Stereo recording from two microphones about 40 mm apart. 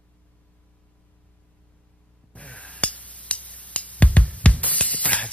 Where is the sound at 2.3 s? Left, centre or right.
Left.